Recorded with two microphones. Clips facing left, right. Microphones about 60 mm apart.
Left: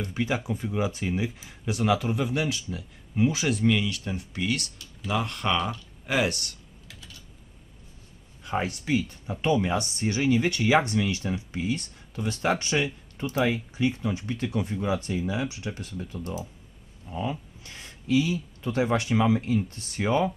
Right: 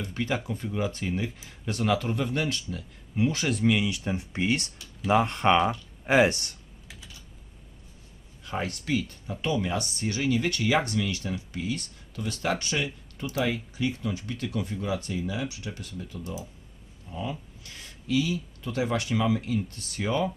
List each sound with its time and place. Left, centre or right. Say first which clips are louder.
0.1 s speech: even; centre
3.8 s speech: right 2 dB; centre
8.4 s speech: left 3 dB; centre